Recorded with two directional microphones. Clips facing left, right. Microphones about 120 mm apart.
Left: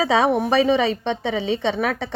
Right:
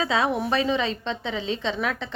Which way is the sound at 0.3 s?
55° left (ahead or behind).